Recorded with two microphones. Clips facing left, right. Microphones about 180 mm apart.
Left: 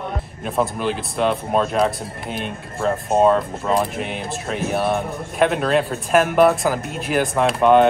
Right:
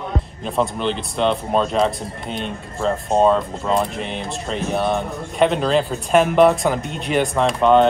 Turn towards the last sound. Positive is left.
turn(degrees=5)  # may be behind; listen again after turning